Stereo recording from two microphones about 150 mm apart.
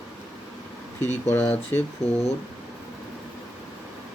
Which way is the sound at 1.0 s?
15° left (ahead or behind).